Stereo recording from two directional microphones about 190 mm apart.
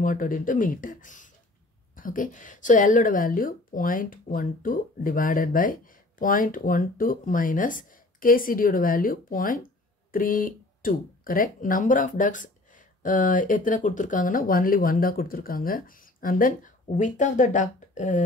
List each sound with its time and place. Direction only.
0.0 s speech: 45° left (ahead or behind)